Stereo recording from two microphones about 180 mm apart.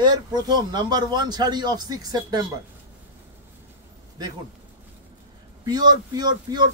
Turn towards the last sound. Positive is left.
turn(degrees=-25)  # may be behind; listen again after turning